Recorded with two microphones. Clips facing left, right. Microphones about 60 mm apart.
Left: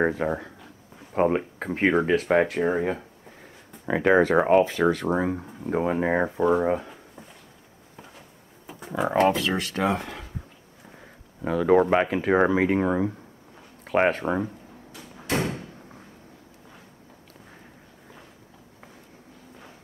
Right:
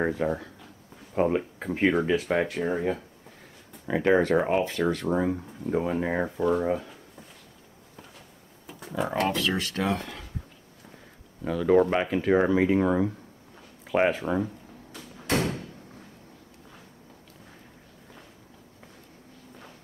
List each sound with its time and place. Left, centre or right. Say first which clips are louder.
0.2 s speech: left 1 dB; centre
5.7 s speech: left 3 dB; centre
7.9 s a sound: left 3 dB; centre
8.6 s speech: left 3 dB; centre
11.0 s speech: left 3 dB; centre
14.2 s speech: left 1 dB; centre
14.9 s door: even; centre